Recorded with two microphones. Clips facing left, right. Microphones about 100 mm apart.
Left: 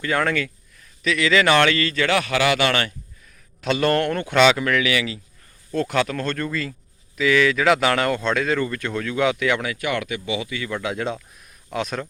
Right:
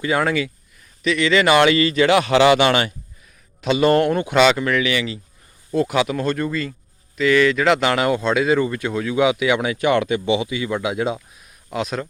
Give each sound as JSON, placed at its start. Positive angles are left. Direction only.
{"t": 0.0, "sound": "speech", "side_deg": -10}
{"t": 3.6, "sound": "speech", "side_deg": -5}
{"t": 4.4, "sound": "speech", "side_deg": 0}
{"t": 5.7, "sound": "speech", "side_deg": -10}
{"t": 9.6, "sound": "speech", "side_deg": -25}